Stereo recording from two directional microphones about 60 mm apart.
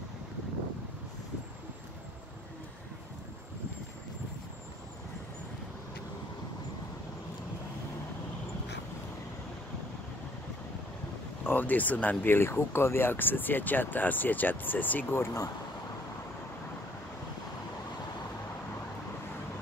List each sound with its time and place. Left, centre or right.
11.4 s speech: left
12.4 s speech: left
15.0 s speech: left